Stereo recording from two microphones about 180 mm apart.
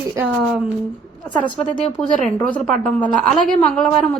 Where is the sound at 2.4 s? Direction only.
10° left (ahead or behind).